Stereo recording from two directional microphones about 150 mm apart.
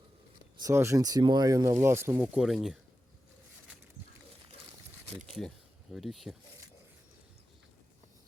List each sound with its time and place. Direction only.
0.6 s speech: 20° right (ahead or behind); by 2.7 s 5° right (ahead or behind)
5.4 s speech: centre (ahead or behind)